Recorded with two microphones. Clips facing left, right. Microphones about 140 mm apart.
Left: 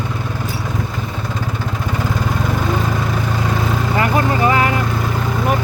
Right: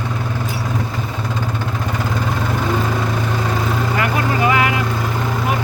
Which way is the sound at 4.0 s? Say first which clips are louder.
Left 4 dB; 35° left (ahead or behind).